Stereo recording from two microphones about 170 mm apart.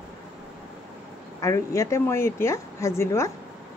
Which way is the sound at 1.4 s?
15° left (ahead or behind).